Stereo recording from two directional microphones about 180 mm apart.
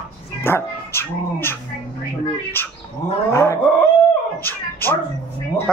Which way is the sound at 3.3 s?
15° left (ahead or behind).